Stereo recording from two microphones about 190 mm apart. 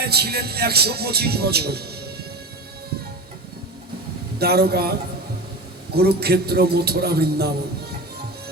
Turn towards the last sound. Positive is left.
turn(degrees=-55)  # may be behind; listen again after turning